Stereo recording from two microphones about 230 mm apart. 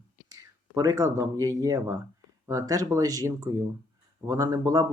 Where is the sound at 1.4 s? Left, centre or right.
Centre.